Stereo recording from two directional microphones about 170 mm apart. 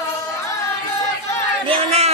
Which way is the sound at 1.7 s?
35° right (ahead or behind).